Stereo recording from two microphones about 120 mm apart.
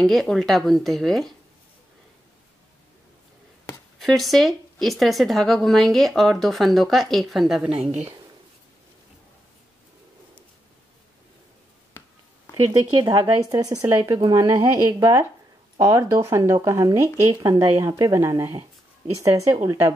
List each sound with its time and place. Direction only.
0.0 s speech: centre (ahead or behind)
4.0 s speech: centre (ahead or behind)
13.0 s speech: 30° right (ahead or behind)